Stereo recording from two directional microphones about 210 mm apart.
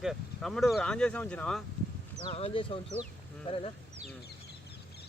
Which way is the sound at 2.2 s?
25° left (ahead or behind).